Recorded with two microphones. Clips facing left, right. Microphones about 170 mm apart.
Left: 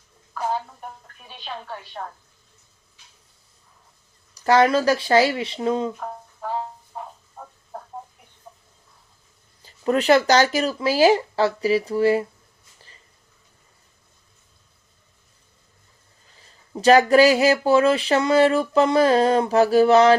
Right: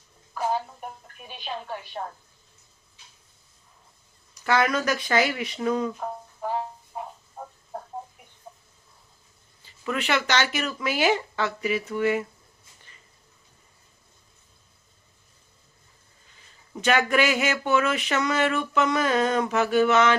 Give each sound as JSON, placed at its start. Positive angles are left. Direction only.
{"t": 4.4, "sound": "speech", "side_deg": 30}
{"t": 9.6, "sound": "speech", "side_deg": 40}
{"t": 16.7, "sound": "speech", "side_deg": 35}